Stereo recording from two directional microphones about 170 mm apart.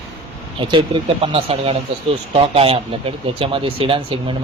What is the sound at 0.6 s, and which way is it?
Speech, 30° right (ahead or behind).